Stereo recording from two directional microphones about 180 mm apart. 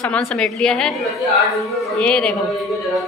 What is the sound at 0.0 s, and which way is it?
Speech, 5° left (ahead or behind).